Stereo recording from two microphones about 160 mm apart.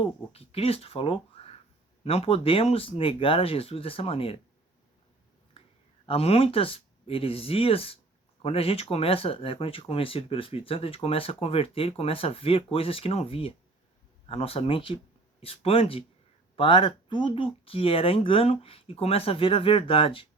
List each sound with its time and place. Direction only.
0.3 s speech: 40° left (ahead or behind)
6.1 s speech: 40° left (ahead or behind)